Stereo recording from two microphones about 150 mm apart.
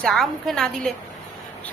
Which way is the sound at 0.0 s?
Centre (ahead or behind).